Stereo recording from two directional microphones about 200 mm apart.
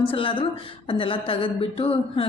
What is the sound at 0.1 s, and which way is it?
A woman's voice, 25° left (ahead or behind).